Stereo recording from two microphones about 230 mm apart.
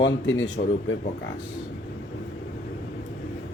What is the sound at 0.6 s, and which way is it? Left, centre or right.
Speech, left.